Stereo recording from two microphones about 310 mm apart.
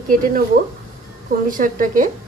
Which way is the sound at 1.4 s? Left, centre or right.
Right.